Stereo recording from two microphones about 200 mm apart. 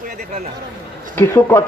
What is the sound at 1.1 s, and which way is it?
Speech, 10° left (ahead or behind).